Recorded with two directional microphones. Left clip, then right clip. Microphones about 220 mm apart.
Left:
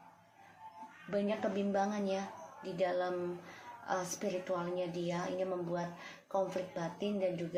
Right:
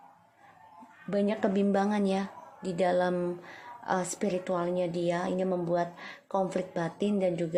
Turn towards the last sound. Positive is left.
turn(degrees=-45)  # may be behind; listen again after turning